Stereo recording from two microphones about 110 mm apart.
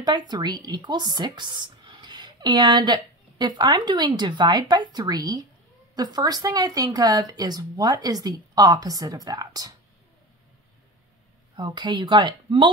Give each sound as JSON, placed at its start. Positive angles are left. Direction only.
{"t": 0.0, "sound": "speech", "side_deg": -40}
{"t": 11.5, "sound": "speech", "side_deg": -45}